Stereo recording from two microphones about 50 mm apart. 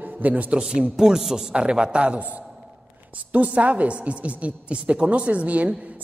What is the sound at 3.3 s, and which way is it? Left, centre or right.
A woman's voice, right.